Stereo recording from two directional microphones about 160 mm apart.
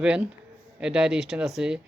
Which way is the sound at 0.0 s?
5° right (ahead or behind).